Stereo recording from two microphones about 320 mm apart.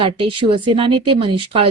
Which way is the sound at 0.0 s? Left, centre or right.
Centre.